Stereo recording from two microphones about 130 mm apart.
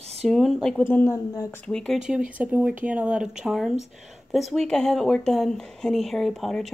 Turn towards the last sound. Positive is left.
turn(degrees=0)  # may be behind; listen again after turning